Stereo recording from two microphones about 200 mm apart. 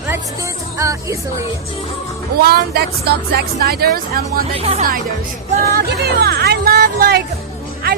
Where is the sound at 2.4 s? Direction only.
50° right (ahead or behind).